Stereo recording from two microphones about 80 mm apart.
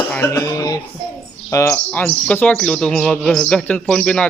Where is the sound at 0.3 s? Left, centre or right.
Left.